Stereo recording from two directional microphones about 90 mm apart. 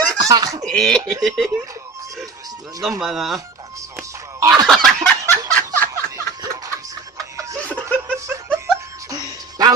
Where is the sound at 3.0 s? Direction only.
5° right (ahead or behind).